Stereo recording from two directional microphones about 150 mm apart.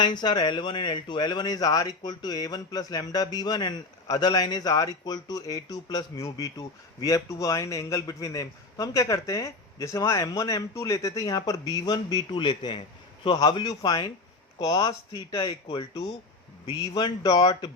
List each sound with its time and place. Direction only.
0.0 s speech: 30° left (ahead or behind)